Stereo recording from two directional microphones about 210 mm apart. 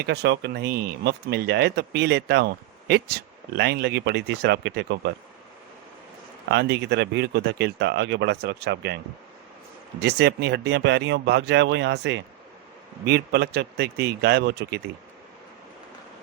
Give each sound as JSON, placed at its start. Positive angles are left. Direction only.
{"t": 0.0, "sound": "speech", "side_deg": -50}
{"t": 6.5, "sound": "speech", "side_deg": -55}
{"t": 10.0, "sound": "speech", "side_deg": -50}